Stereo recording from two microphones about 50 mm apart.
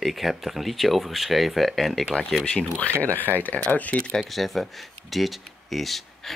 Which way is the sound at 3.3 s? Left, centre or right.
Left.